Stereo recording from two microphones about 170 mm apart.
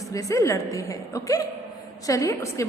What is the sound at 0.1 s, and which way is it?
A woman's voice, 20° left (ahead or behind).